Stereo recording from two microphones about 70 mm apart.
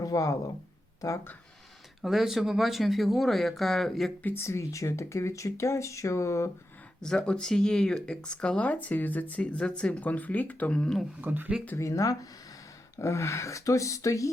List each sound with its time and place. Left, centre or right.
0.0 s speech: left
2.0 s speech: centre
4.2 s speech: left
4.4 s speech: left
7.0 s speech: centre
11.2 s speech: right
11.8 s speech: left